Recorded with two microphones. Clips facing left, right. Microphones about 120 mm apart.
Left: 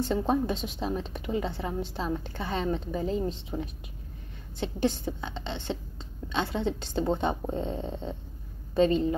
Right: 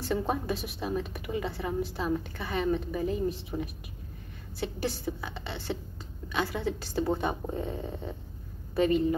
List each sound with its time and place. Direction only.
0.0 s a woman's voice: 25° left (ahead or behind)